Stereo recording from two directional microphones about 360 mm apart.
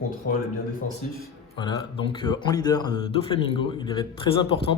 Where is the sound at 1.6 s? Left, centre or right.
Centre.